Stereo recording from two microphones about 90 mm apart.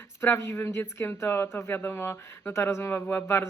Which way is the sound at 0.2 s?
25° left (ahead or behind).